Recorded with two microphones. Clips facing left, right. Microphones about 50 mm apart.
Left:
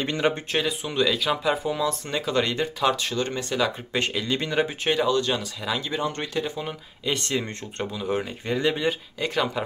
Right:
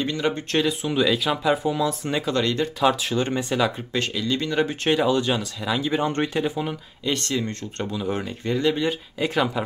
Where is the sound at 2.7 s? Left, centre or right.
Centre.